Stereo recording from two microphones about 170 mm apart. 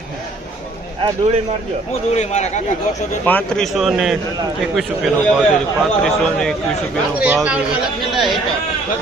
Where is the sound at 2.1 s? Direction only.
40° left (ahead or behind).